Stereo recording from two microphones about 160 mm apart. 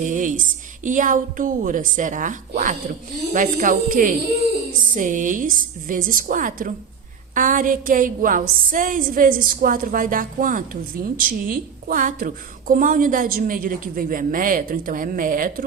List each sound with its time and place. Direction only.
0.0 s a woman's voice: 55° right (ahead or behind)